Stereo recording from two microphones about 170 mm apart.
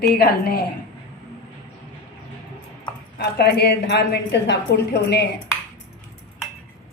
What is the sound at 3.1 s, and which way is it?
A woman's voice, 75° left (ahead or behind).